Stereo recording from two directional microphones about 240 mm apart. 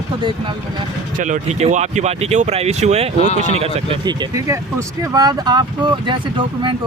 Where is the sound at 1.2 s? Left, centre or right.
Right.